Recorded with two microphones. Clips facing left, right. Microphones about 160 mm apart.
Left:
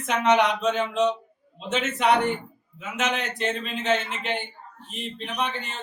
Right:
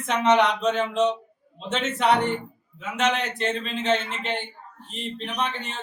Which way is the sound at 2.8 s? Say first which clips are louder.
Right 3 dB; 5° left (ahead or behind).